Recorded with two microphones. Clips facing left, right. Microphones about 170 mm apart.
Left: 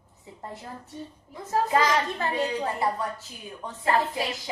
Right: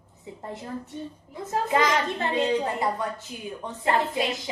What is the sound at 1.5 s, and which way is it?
A woman's voice, 20° right (ahead or behind).